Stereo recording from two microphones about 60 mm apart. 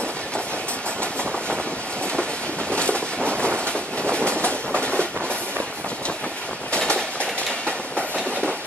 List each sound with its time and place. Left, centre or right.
2.7 s a sound: centre
3.3 s train: centre
6.7 s train: centre